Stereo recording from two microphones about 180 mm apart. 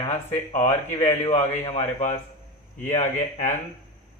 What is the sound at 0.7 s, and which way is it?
Speech, 35° left (ahead or behind).